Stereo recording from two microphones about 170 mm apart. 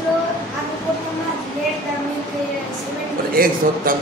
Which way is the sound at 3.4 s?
55° right (ahead or behind).